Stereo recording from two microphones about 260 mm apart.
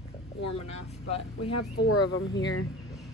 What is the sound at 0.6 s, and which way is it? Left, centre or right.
Speech, left.